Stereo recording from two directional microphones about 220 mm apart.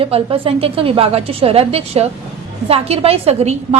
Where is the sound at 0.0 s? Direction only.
25° right (ahead or behind).